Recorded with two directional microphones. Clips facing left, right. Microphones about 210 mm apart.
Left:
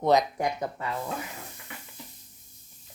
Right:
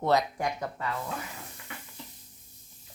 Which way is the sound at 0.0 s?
20° left (ahead or behind).